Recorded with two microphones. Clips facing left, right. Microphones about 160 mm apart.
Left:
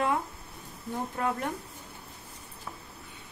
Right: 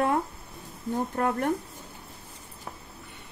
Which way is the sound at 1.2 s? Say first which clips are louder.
Right 5 dB; 50° right (ahead or behind).